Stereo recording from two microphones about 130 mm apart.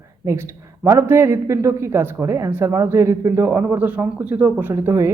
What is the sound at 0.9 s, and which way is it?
Speech, 20° right (ahead or behind).